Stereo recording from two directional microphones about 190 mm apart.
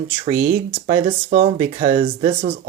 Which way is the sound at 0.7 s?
30° right (ahead or behind).